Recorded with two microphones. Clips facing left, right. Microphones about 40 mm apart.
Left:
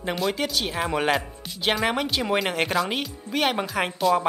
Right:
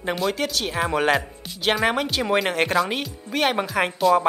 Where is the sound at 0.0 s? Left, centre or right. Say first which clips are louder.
Right 2 dB; centre.